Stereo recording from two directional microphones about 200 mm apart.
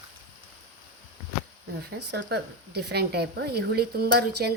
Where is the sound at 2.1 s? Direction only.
55° right (ahead or behind).